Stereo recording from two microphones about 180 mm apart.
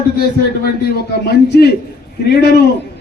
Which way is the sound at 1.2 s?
60° left (ahead or behind).